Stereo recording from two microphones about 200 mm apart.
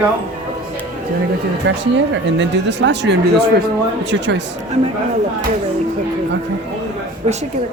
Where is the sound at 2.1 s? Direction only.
65° right (ahead or behind).